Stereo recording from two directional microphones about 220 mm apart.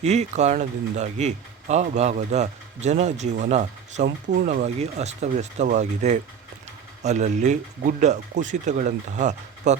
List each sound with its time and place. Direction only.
0.0 s speech: 30° right (ahead or behind)
4.0 s speech: 50° right (ahead or behind)
4.4 s speech: 30° right (ahead or behind)